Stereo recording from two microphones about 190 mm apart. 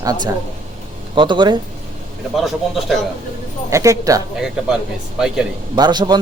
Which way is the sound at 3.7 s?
15° right (ahead or behind).